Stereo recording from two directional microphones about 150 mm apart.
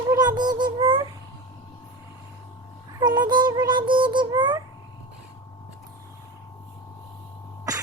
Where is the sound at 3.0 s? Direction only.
30° right (ahead or behind).